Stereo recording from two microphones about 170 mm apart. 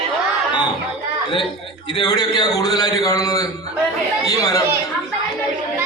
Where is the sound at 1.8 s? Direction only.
25° left (ahead or behind).